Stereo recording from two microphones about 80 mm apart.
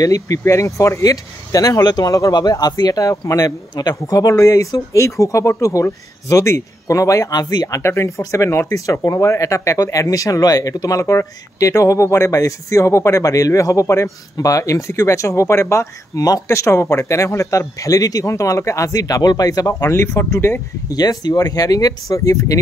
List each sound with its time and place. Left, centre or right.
0.0 s speech: left
2.3 s speech: left
7.3 s speech: left
19.9 s speech: left
20.9 s speech: left